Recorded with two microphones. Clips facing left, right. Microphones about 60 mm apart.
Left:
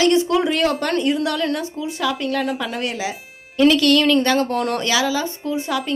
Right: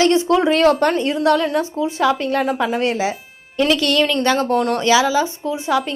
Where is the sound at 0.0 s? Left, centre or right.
Right.